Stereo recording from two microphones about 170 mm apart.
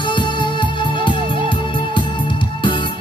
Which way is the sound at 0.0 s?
25° left (ahead or behind).